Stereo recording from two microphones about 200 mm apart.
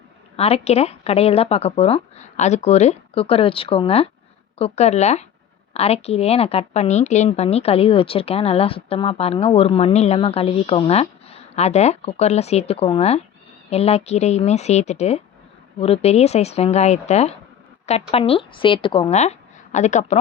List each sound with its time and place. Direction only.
0.3 s a woman's voice: 30° left (ahead or behind)